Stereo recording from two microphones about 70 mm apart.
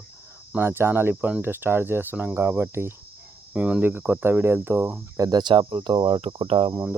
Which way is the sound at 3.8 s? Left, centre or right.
Right.